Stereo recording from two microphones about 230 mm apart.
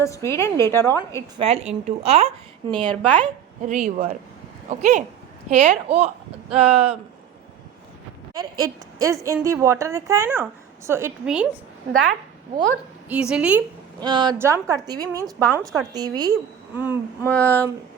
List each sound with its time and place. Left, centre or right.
0.0 s a woman's voice: centre
1.4 s a woman's voice: right
3.7 s a woman's voice: right
8.3 s a woman's voice: centre
13.1 s a woman's voice: centre
14.0 s a woman's voice: centre
17.2 s a woman's voice: centre